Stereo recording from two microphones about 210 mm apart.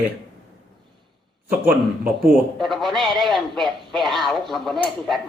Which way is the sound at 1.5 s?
45° right (ahead or behind).